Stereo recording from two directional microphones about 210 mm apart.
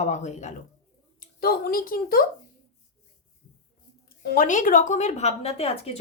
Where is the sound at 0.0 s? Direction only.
35° left (ahead or behind).